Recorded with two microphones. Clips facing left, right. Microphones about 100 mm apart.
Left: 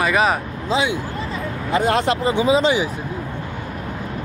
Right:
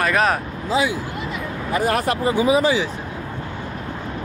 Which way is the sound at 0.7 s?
20° left (ahead or behind).